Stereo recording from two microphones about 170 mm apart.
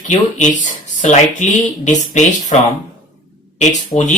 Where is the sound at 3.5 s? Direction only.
45° left (ahead or behind).